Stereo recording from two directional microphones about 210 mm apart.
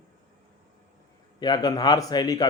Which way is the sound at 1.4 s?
20° left (ahead or behind).